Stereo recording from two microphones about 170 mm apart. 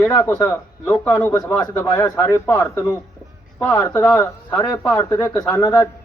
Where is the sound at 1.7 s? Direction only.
20° left (ahead or behind).